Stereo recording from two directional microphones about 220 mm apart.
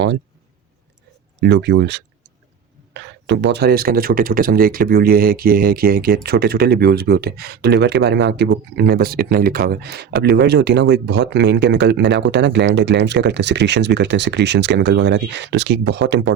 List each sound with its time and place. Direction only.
1.4 s speech: 50° right (ahead or behind)